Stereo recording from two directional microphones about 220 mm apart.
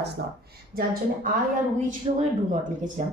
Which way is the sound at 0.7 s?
45° right (ahead or behind).